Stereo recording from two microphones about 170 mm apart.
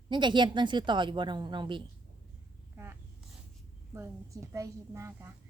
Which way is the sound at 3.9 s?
15° right (ahead or behind).